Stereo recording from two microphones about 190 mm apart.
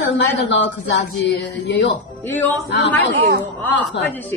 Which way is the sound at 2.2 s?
10° left (ahead or behind).